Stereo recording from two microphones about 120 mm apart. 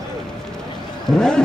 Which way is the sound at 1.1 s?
5° left (ahead or behind).